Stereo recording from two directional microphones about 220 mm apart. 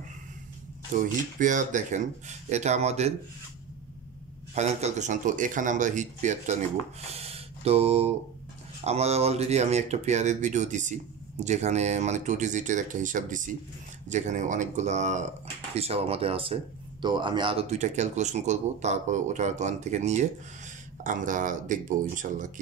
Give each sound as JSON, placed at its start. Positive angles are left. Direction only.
{"t": 0.9, "sound": "speech", "side_deg": -35}
{"t": 4.6, "sound": "speech", "side_deg": -30}